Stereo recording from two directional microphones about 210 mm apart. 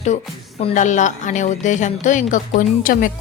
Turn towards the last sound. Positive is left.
turn(degrees=40)  # may be behind; listen again after turning